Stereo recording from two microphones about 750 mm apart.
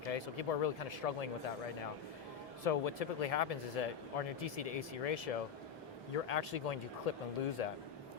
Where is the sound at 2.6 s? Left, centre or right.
Left.